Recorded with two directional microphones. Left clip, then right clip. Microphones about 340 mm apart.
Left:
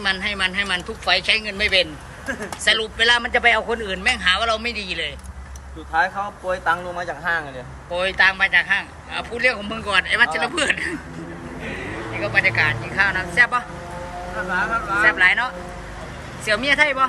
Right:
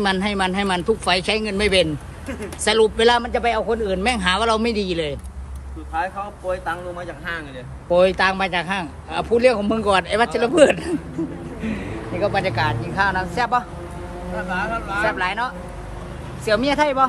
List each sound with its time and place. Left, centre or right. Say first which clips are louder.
0.0 s a man's voice: right 1 dB; centre
5.9 s a man's voice: left 4 dB; left
7.9 s a man's voice: right 2 dB; centre